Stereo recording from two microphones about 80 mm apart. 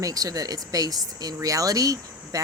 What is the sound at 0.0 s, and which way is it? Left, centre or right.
Speech, right.